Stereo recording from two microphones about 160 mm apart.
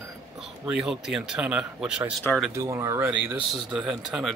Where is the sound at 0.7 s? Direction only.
5° right (ahead or behind).